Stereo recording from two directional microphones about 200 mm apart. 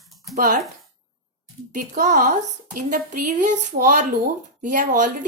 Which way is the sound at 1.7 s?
40° right (ahead or behind).